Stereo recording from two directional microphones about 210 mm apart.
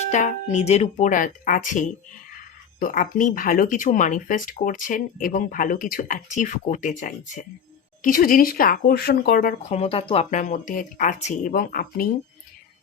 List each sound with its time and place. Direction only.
0.1 s speech: 35° left (ahead or behind)